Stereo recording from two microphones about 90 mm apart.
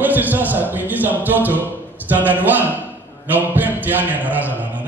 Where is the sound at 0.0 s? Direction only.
20° right (ahead or behind).